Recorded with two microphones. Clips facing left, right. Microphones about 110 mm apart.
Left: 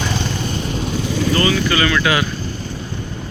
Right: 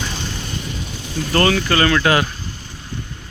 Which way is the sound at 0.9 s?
90° left.